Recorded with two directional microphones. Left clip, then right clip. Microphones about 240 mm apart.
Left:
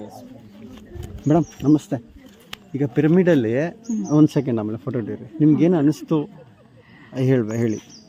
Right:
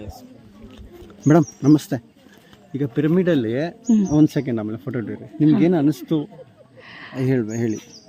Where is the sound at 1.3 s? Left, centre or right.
Right.